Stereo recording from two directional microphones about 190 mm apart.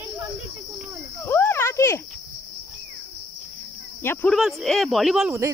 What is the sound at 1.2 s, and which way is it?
Speech, 10° left (ahead or behind).